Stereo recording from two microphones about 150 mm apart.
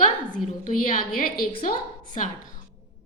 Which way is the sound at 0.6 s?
70° left (ahead or behind).